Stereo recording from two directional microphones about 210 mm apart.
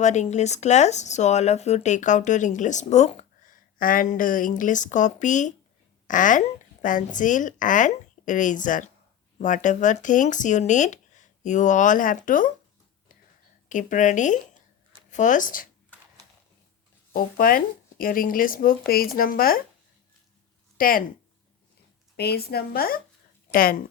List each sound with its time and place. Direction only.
0.0 s speech: 35° left (ahead or behind)
13.7 s speech: 35° left (ahead or behind)
17.1 s speech: 45° left (ahead or behind)
20.7 s speech: 45° left (ahead or behind)
22.1 s speech: 50° left (ahead or behind)